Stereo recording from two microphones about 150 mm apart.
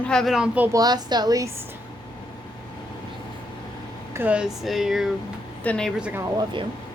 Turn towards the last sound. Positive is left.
turn(degrees=-30)  # may be behind; listen again after turning